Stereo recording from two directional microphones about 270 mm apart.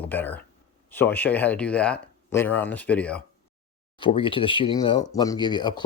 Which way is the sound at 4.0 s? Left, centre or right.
Centre.